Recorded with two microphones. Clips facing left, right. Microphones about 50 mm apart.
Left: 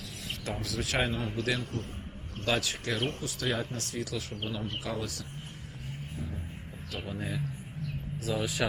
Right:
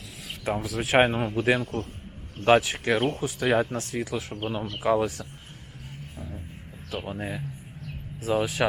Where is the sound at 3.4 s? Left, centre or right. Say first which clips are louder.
Right 9 dB; right.